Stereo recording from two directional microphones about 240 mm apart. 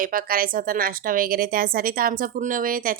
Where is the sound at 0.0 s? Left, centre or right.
Right.